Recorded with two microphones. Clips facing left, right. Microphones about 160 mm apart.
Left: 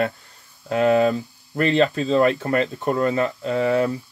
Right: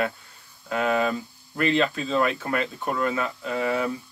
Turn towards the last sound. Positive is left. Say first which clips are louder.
# left 6 dB
turn(degrees=40)  # may be behind; listen again after turning